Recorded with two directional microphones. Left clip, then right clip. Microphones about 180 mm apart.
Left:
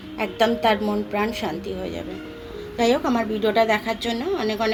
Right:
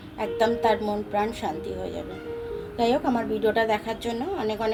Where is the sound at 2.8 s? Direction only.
35° left (ahead or behind).